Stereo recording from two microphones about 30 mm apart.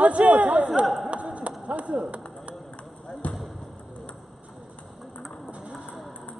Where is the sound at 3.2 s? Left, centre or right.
Left.